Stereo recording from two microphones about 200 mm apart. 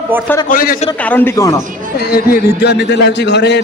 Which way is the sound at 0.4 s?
45° left (ahead or behind).